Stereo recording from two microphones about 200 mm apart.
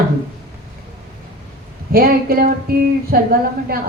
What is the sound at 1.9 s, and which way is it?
A woman's voice, 50° right (ahead or behind).